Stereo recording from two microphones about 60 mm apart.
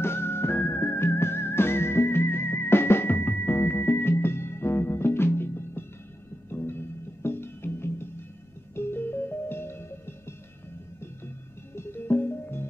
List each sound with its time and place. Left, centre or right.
0.0 s music: left
11.7 s music: left